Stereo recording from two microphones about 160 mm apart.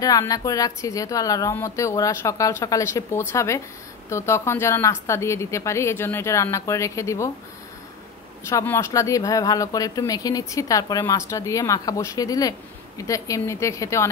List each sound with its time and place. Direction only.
0.0 s a woman's voice: 20° left (ahead or behind)
8.5 s speech: 20° left (ahead or behind)